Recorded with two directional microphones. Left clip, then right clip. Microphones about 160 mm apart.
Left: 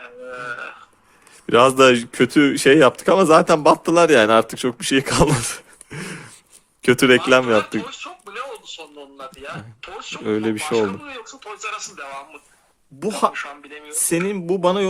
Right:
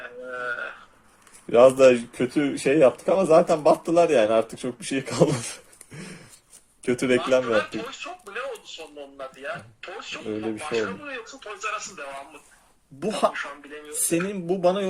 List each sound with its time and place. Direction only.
0.0 s a sound: 50° left (ahead or behind)
1.5 s speech: 60° left (ahead or behind)
6.8 s speech: 60° left (ahead or behind)
9.1 s speech: 55° left (ahead or behind)
13.0 s speech: 35° left (ahead or behind)
13.3 s speech: 55° left (ahead or behind)
14.1 s speech: 45° left (ahead or behind)